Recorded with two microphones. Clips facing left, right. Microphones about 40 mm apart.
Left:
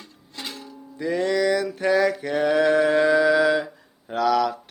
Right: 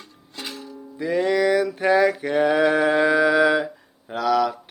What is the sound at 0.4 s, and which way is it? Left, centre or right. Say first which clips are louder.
Music: right 2 dB; centre.